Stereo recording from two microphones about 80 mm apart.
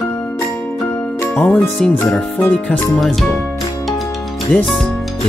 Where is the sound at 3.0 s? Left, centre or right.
Centre.